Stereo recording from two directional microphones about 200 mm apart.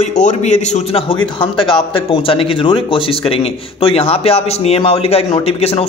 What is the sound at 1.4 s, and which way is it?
Speech, 25° left (ahead or behind).